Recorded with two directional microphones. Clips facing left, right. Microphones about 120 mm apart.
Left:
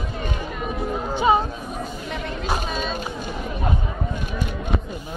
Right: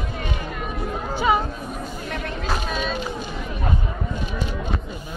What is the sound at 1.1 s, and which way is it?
Music, 25° left (ahead or behind).